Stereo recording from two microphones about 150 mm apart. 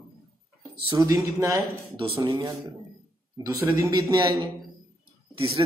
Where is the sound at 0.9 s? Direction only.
20° right (ahead or behind).